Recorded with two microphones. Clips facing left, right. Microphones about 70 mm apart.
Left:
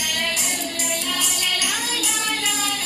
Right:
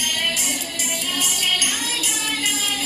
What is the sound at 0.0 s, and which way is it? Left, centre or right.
Music, left.